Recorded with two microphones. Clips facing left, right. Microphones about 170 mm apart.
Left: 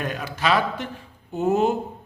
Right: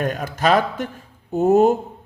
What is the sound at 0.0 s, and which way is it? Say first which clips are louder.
A man's voice: right 5 dB; 45° right (ahead or behind).